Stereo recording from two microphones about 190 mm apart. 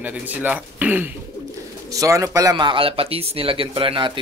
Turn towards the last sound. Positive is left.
turn(degrees=-25)  # may be behind; listen again after turning